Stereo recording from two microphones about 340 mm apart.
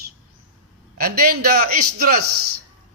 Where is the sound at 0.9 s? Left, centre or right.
Right.